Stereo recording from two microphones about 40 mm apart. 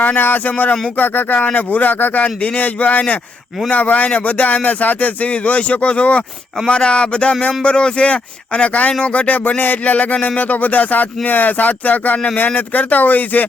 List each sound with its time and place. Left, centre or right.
0.0 s speech: left
2.2 s speech: left
8.9 s speech: left
9.1 s speech: left